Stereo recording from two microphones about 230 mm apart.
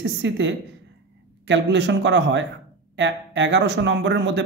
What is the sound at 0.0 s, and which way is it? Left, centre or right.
Speech, right.